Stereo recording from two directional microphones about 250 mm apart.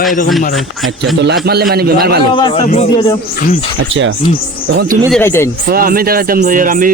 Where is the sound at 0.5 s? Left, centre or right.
Centre.